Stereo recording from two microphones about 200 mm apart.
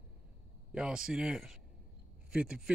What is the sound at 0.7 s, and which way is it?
Speech, 5° right (ahead or behind).